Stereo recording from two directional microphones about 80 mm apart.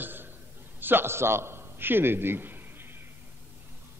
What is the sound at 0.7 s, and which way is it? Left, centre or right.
A man's voice, right.